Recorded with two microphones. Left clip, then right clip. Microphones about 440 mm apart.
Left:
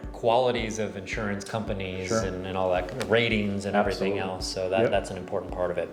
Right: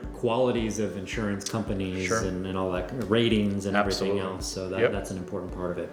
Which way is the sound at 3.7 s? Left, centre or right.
Right.